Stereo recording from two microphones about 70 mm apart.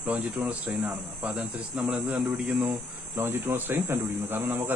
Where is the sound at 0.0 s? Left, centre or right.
Centre.